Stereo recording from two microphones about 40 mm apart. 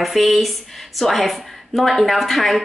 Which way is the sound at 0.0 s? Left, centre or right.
Centre.